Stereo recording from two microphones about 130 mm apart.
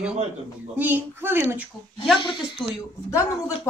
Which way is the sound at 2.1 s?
40° left (ahead or behind).